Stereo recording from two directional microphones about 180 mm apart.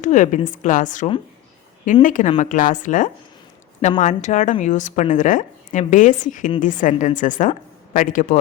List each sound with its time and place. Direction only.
0.0 s a woman's voice: 45° left (ahead or behind)